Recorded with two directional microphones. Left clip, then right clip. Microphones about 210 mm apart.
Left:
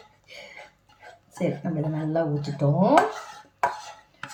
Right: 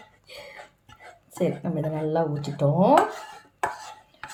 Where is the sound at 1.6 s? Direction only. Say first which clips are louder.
Right 2 dB; 35° right (ahead or behind).